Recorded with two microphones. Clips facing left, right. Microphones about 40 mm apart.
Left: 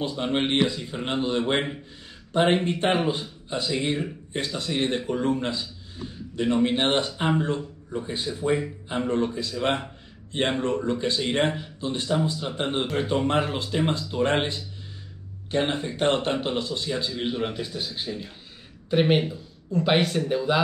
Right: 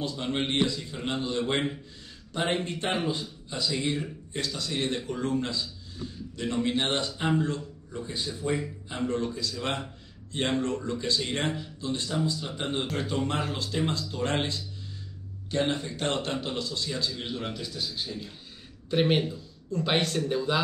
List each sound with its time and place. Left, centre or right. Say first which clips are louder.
0.0 s a man's voice: left 5 dB; left
18.9 s speech: left 3 dB; centre